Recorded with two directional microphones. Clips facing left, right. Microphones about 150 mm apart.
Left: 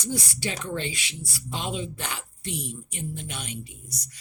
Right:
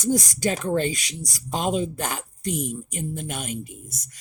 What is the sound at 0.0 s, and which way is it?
Speech, 45° right (ahead or behind).